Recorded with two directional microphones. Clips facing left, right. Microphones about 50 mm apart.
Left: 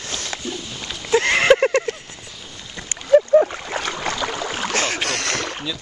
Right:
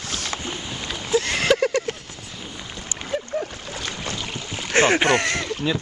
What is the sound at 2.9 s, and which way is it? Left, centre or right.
Boat, left.